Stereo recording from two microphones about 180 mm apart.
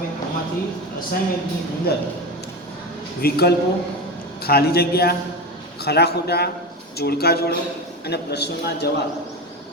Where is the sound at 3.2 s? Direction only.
60° left (ahead or behind).